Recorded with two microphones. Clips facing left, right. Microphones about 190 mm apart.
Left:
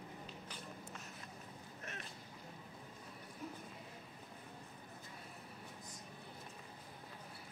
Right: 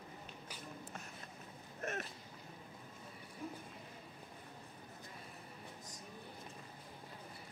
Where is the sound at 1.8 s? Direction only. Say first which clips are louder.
Right 10 dB; 45° right (ahead or behind).